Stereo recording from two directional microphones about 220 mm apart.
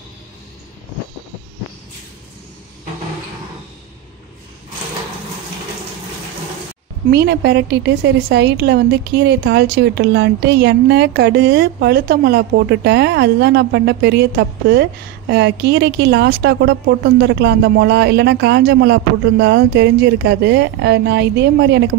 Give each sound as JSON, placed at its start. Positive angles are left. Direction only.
{"t": 7.1, "sound": "a woman's voice", "side_deg": -50}